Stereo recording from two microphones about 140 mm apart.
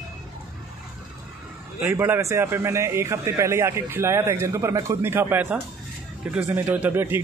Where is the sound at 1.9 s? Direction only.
15° right (ahead or behind).